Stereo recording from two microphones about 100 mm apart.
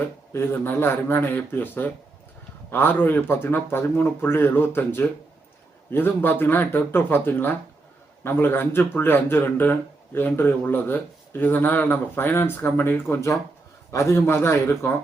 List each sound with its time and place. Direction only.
0.0 s speech: 20° left (ahead or behind)